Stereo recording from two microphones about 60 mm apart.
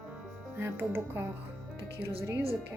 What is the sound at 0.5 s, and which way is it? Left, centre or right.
Speech, right.